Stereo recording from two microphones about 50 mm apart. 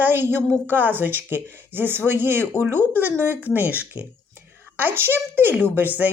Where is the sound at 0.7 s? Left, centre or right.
Right.